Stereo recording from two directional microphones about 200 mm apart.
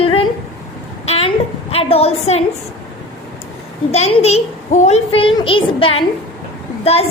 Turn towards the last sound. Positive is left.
turn(degrees=30)  # may be behind; listen again after turning